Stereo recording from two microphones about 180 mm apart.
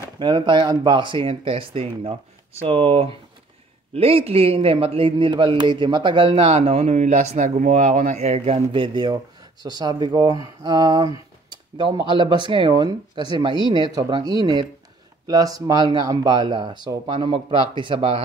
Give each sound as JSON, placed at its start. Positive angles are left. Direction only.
{"t": 0.2, "sound": "a man's voice", "side_deg": -25}